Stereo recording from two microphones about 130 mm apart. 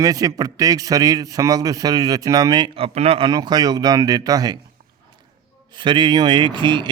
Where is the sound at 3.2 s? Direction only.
30° right (ahead or behind).